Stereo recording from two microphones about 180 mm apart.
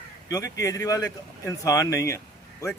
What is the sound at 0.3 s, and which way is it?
Speech, 20° left (ahead or behind).